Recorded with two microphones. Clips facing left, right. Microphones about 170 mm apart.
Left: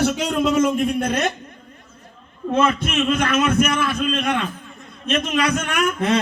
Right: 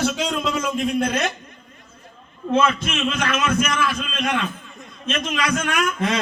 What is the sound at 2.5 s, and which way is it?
A man's voice, 55° left (ahead or behind).